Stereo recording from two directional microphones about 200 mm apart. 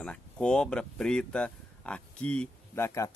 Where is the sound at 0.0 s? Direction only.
5° left (ahead or behind).